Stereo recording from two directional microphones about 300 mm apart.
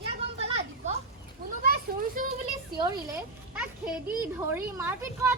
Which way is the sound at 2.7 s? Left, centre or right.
Centre.